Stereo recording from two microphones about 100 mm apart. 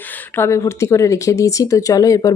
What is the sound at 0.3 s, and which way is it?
Speech, 30° left (ahead or behind).